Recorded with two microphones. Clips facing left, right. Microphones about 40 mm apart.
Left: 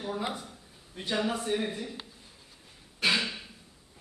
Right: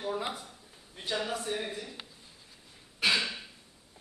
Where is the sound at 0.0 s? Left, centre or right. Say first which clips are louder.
Even; centre.